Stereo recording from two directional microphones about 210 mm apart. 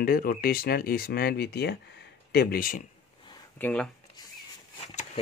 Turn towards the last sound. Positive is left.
turn(degrees=35)  # may be behind; listen again after turning